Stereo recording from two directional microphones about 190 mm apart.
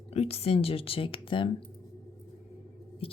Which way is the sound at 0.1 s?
35° left (ahead or behind).